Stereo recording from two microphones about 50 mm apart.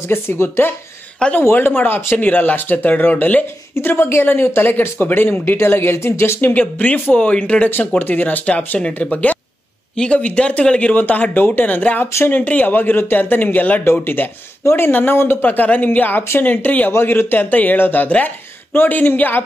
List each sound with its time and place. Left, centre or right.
0.1 s speech: left
2.1 s speech: left
3.7 s speech: left
6.5 s speech: left
8.0 s speech: left
11.0 s speech: left
16.9 s speech: left